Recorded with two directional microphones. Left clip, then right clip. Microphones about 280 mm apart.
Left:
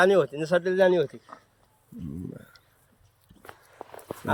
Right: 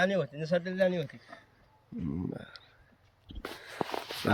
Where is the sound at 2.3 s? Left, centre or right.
Centre.